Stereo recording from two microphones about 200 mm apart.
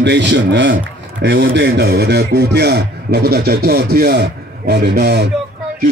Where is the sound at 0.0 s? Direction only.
60° right (ahead or behind).